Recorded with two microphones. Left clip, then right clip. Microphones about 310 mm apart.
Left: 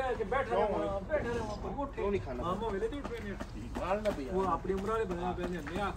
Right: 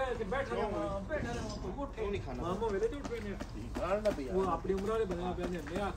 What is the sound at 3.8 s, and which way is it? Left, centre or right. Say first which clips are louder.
Speech: even; centre.